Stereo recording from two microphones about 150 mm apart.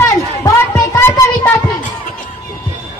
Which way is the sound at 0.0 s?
20° left (ahead or behind).